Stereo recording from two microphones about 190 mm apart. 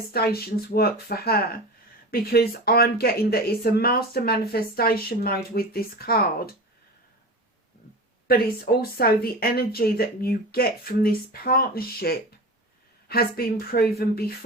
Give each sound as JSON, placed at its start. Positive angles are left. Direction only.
{"t": 0.1, "sound": "speech", "side_deg": 55}
{"t": 8.3, "sound": "speech", "side_deg": 55}